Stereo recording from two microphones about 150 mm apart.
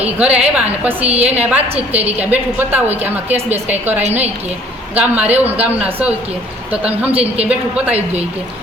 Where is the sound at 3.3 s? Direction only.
45° right (ahead or behind).